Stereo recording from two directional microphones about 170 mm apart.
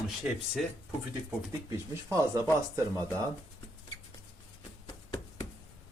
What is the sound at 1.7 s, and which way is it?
Speech, 15° right (ahead or behind).